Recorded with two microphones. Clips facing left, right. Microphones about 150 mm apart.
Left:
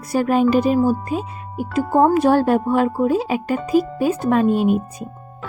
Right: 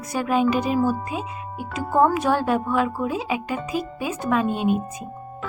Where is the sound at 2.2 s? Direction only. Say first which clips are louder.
Left 6 dB; 35° left (ahead or behind).